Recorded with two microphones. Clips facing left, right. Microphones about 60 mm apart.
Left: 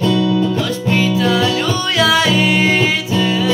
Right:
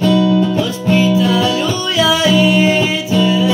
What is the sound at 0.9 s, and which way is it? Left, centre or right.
Music, left.